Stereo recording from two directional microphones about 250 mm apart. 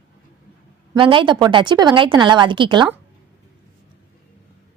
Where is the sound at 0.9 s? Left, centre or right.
Centre.